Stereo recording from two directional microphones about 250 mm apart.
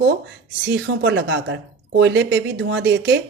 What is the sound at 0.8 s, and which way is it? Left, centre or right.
Speech, right.